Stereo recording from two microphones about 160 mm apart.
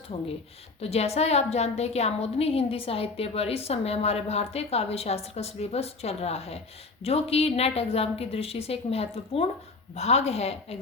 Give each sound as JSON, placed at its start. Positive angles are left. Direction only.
{"t": 0.1, "sound": "a woman's voice", "side_deg": 35}